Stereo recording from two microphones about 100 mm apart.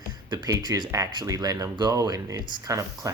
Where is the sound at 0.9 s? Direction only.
35° right (ahead or behind).